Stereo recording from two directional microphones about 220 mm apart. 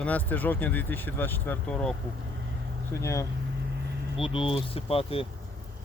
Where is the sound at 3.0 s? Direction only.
15° left (ahead or behind).